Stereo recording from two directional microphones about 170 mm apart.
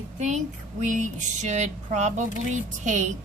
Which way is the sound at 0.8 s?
45° right (ahead or behind).